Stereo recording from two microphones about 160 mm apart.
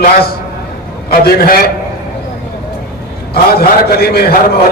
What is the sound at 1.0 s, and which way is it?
Speech, 70° left (ahead or behind).